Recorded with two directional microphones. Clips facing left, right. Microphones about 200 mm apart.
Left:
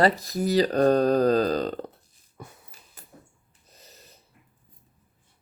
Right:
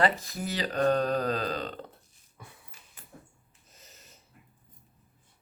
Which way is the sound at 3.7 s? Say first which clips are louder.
Left 4 dB; 35° left (ahead or behind).